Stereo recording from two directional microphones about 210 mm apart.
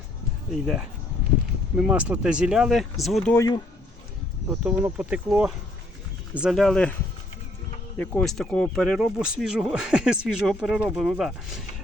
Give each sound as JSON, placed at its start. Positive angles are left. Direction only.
{"t": 0.6, "sound": "speech", "side_deg": -5}
{"t": 3.3, "sound": "speech", "side_deg": 15}
{"t": 4.4, "sound": "speech", "side_deg": -10}
{"t": 7.9, "sound": "speech", "side_deg": 5}